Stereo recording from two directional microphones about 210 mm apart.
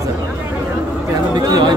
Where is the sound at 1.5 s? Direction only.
20° right (ahead or behind).